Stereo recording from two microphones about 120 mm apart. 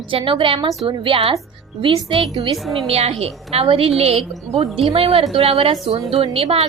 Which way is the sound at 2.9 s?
55° right (ahead or behind).